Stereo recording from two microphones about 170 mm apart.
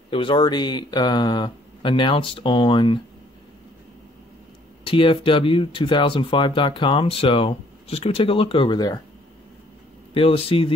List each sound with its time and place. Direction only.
0.1 s speech: 30° left (ahead or behind)
4.8 s speech: 30° left (ahead or behind)
10.1 s speech: 35° left (ahead or behind)